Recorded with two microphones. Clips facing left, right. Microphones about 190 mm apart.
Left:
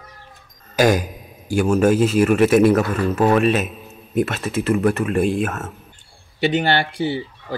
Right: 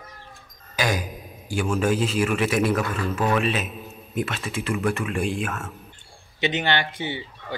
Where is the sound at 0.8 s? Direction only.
45° left (ahead or behind).